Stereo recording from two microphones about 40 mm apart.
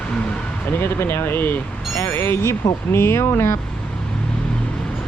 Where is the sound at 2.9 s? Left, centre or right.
Left.